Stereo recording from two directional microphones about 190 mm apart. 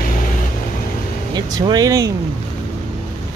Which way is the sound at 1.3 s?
20° right (ahead or behind).